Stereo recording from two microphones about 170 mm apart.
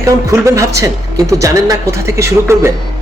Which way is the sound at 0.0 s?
20° right (ahead or behind).